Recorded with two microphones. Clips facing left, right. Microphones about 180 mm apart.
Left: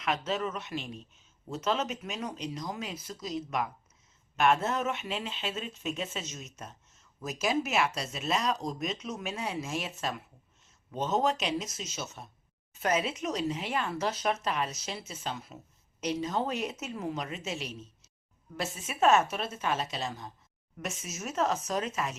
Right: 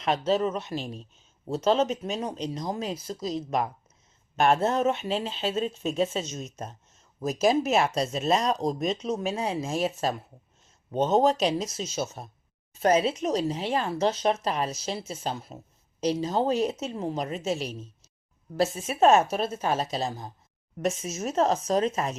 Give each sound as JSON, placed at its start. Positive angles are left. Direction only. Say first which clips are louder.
{"t": 0.0, "sound": "speech", "louder": "right 7 dB", "side_deg": -35}